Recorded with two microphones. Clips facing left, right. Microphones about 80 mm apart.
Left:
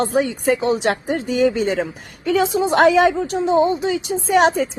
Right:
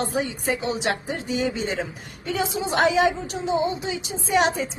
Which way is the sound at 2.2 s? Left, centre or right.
Left.